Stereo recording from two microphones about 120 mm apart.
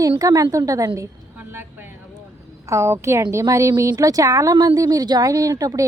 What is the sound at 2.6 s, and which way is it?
A woman's voice, 25° right (ahead or behind).